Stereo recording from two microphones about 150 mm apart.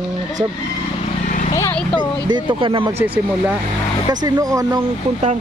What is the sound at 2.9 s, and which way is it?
Speech, 15° right (ahead or behind).